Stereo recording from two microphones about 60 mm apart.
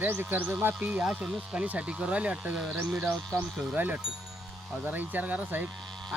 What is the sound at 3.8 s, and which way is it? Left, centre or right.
Speech, right.